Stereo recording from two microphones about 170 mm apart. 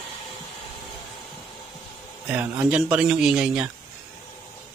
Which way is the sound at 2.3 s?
10° right (ahead or behind).